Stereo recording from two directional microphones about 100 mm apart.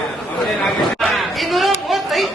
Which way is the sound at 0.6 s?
Centre (ahead or behind).